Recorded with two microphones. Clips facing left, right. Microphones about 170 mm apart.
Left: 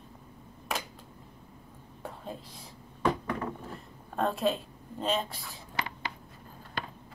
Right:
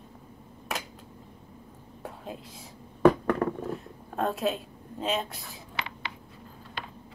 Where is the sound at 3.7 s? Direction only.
Centre (ahead or behind).